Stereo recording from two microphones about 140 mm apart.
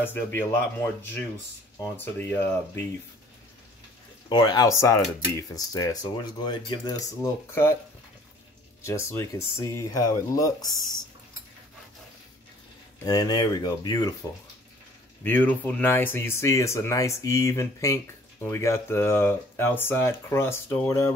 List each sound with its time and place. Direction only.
0.0 s speech: 15° left (ahead or behind)
1.8 s speech: 15° left (ahead or behind)
4.3 s speech: 30° left (ahead or behind)
8.8 s speech: 20° left (ahead or behind)
13.0 s speech: 25° left (ahead or behind)
15.2 s speech: 15° left (ahead or behind)